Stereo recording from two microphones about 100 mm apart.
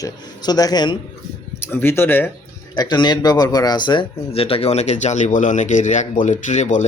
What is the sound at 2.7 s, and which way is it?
Speech, 45° left (ahead or behind).